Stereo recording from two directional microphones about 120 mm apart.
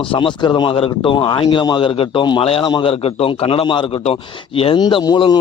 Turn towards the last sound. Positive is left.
turn(degrees=40)  # may be behind; listen again after turning